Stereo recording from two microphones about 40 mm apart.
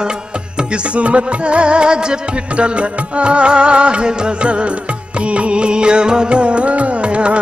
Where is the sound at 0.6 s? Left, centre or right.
Right.